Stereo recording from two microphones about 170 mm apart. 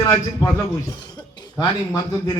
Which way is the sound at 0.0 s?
20° left (ahead or behind).